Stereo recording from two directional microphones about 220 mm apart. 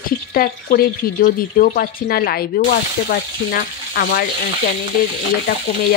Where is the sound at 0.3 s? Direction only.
40° left (ahead or behind).